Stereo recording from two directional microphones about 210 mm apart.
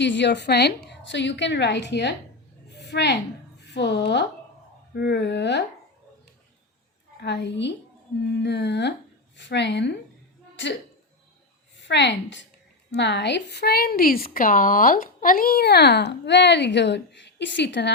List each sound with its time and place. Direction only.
0.0 s a woman's voice: 55° left (ahead or behind)
2.7 s a sound: 55° left (ahead or behind)
3.8 s a woman's voice: 55° left (ahead or behind)
7.2 s a woman's voice: 55° left (ahead or behind)
11.8 s a woman's voice: 55° left (ahead or behind)